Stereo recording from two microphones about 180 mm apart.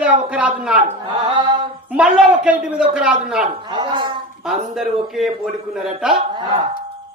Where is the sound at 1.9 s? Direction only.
5° right (ahead or behind).